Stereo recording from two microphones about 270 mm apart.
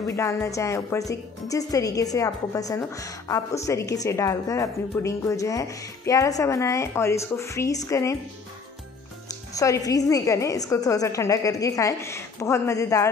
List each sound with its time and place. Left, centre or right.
0.0 s speech: centre
9.5 s speech: centre